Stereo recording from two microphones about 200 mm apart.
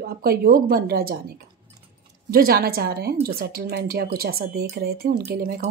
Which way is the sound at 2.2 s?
50° right (ahead or behind).